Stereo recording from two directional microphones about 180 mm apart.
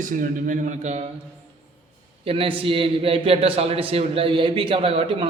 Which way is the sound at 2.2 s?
30° right (ahead or behind).